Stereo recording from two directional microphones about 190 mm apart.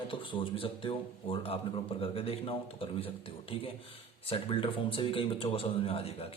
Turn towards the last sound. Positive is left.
turn(degrees=30)  # may be behind; listen again after turning